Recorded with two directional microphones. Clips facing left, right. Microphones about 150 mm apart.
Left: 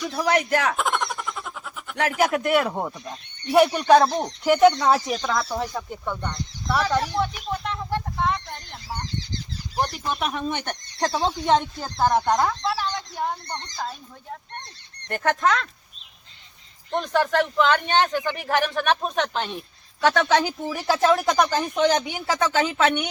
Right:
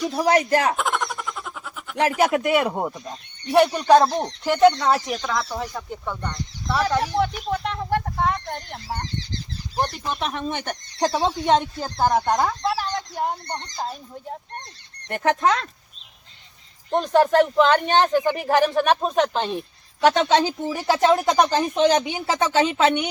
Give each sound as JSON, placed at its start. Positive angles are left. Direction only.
{"t": 0.0, "sound": "speech", "side_deg": -30}
{"t": 0.8, "sound": "a sound", "side_deg": 0}
{"t": 2.0, "sound": "speech", "side_deg": -25}
{"t": 2.4, "sound": "speech", "side_deg": -10}
{"t": 3.5, "sound": "speech", "side_deg": 5}
{"t": 4.3, "sound": "speech", "side_deg": 10}
{"t": 4.9, "sound": "speech", "side_deg": 0}
{"t": 7.2, "sound": "a sound", "side_deg": -60}
{"t": 9.8, "sound": "speech", "side_deg": 0}
{"t": 11.1, "sound": "speech", "side_deg": -15}
{"t": 12.7, "sound": "speech", "side_deg": -35}
{"t": 17.0, "sound": "speech", "side_deg": -30}
{"t": 20.0, "sound": "speech", "side_deg": -20}